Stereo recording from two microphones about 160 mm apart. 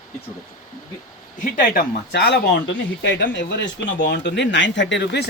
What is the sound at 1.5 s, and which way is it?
Speech, 65° left (ahead or behind).